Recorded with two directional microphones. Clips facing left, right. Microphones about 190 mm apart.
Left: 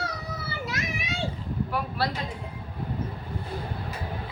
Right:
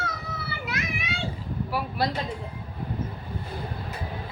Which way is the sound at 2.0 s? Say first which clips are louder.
Right 2 dB; 15° right (ahead or behind).